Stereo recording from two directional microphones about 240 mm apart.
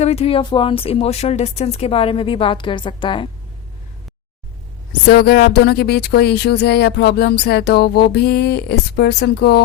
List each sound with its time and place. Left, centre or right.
0.0 s a woman's voice: left
5.0 s speech: left